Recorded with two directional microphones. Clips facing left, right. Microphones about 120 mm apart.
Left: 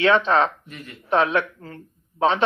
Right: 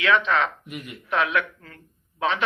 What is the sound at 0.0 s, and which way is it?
Speech, 30° left (ahead or behind).